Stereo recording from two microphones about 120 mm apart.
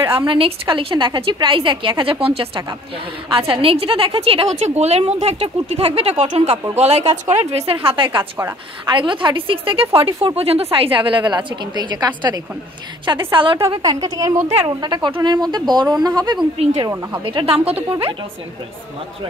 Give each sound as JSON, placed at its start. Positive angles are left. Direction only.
{"t": 0.1, "sound": "a woman's voice", "side_deg": -45}
{"t": 4.6, "sound": "speech", "side_deg": -70}
{"t": 8.2, "sound": "a woman's voice", "side_deg": -20}
{"t": 8.8, "sound": "a woman's voice", "side_deg": -45}
{"t": 13.3, "sound": "a woman's voice", "side_deg": -45}
{"t": 13.8, "sound": "speech", "side_deg": -35}
{"t": 16.6, "sound": "speech", "side_deg": -60}
{"t": 17.2, "sound": "a woman's voice", "side_deg": -45}